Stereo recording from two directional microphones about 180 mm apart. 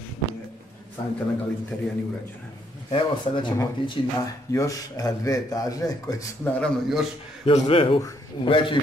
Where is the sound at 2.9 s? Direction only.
25° left (ahead or behind).